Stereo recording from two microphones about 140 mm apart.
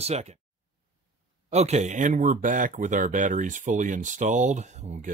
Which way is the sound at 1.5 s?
50° right (ahead or behind).